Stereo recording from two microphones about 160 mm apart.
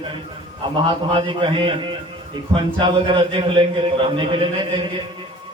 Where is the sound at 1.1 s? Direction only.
30° right (ahead or behind).